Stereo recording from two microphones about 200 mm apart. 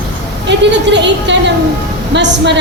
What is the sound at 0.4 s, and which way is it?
A woman's voice, 60° right (ahead or behind).